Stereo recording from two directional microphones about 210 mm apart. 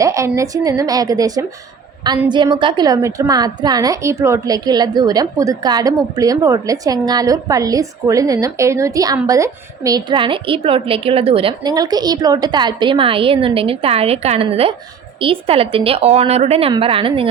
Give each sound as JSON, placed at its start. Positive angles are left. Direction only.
{"t": 0.0, "sound": "a woman's voice", "side_deg": -15}